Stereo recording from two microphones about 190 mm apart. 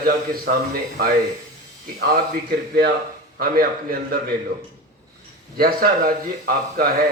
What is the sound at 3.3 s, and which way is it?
Speech, 50° right (ahead or behind).